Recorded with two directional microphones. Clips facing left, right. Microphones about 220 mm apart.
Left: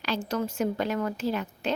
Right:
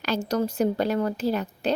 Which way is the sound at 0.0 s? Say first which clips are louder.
Right 4 dB; 40° right (ahead or behind).